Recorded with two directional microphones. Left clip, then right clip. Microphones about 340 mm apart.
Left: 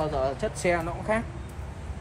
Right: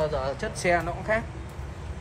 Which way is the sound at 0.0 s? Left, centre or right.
Centre.